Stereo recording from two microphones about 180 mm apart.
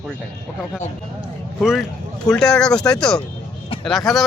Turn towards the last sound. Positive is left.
turn(degrees=0)  # may be behind; listen again after turning